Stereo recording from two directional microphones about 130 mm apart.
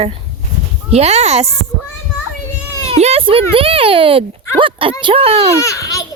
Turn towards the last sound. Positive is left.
turn(degrees=25)  # may be behind; listen again after turning